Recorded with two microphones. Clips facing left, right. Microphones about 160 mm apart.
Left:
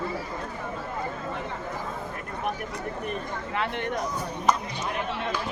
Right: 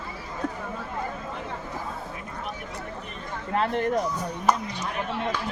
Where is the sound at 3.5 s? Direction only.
40° right (ahead or behind).